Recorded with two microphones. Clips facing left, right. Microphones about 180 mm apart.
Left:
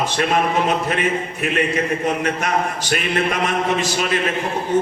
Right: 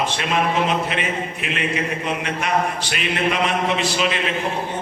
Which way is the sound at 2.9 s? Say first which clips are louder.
Left 4 dB; 45° left (ahead or behind).